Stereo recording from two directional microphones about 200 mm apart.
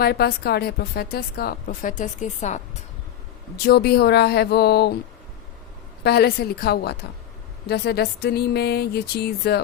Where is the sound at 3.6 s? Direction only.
50° left (ahead or behind).